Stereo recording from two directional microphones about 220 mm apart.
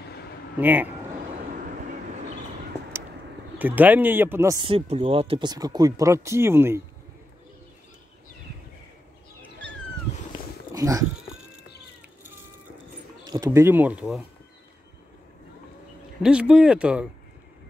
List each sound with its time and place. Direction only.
0.6 s speech: 10° right (ahead or behind)
2.8 s a sound: 10° left (ahead or behind)
3.5 s speech: 10° right (ahead or behind)
10.7 s speech: 15° right (ahead or behind)
13.2 s speech: 20° right (ahead or behind)
16.2 s speech: 5° right (ahead or behind)